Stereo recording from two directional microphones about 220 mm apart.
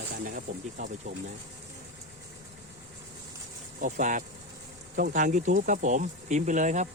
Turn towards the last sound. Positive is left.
turn(degrees=-35)  # may be behind; listen again after turning